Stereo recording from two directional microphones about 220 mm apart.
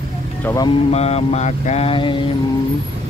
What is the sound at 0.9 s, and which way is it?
Speech, 30° left (ahead or behind).